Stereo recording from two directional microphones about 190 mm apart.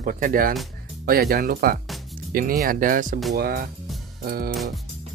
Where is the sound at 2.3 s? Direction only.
45° right (ahead or behind).